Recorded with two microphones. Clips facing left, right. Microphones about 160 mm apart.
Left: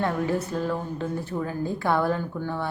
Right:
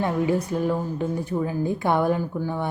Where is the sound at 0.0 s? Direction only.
15° right (ahead or behind).